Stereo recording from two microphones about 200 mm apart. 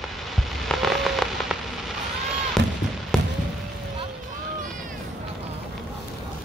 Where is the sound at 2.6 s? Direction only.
60° right (ahead or behind).